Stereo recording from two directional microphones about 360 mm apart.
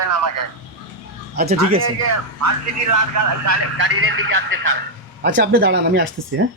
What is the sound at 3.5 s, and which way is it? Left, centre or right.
Speech, right.